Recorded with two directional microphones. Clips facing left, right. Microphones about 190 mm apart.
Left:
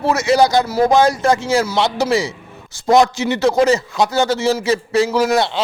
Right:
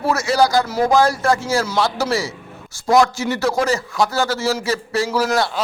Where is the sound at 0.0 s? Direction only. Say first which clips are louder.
Left 3 dB; 20° left (ahead or behind).